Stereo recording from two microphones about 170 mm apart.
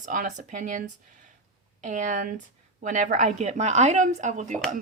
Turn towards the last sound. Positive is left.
turn(degrees=-45)  # may be behind; listen again after turning